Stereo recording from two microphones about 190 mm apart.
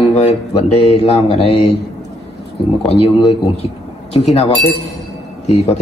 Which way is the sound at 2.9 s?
30° left (ahead or behind).